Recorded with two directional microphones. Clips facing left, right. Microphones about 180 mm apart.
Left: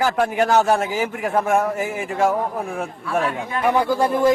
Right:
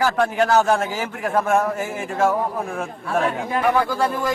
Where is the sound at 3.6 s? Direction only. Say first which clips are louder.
Left 2 dB; 15° left (ahead or behind).